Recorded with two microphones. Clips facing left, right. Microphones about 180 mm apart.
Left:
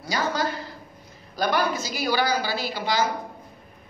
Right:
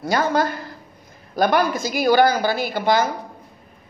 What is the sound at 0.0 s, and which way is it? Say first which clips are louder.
A woman's voice: right 6 dB; 55° right (ahead or behind).